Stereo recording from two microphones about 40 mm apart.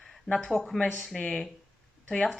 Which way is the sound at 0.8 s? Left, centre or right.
Left.